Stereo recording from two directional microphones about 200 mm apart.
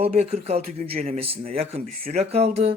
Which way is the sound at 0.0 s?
30° right (ahead or behind).